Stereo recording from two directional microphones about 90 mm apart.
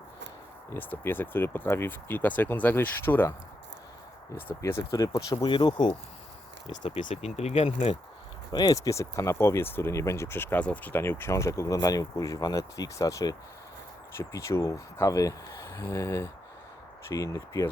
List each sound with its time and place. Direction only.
0.8 s speech: 20° left (ahead or behind)
4.6 s speech: 35° left (ahead or behind); by 6.0 s 55° left (ahead or behind)
6.7 s speech: 90° left
8.5 s speech: 45° left (ahead or behind)